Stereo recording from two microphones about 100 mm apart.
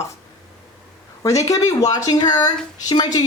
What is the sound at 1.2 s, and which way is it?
Speech, 30° left (ahead or behind).